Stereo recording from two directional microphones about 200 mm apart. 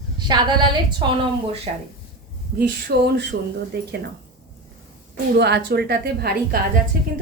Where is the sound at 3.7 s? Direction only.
55° right (ahead or behind).